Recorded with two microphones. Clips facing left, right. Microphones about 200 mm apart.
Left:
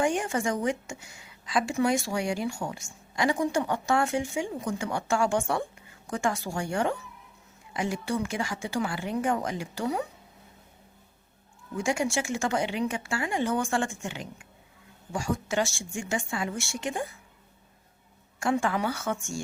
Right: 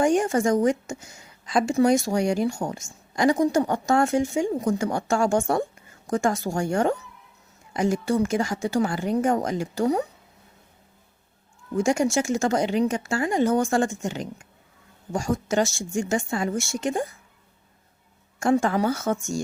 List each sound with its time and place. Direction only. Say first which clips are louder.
0.0 s a woman's voice: right 6 dB; 40° right (ahead or behind)
11.8 s speech: right 6 dB; 45° right (ahead or behind)
18.3 s speech: right 6 dB; 40° right (ahead or behind)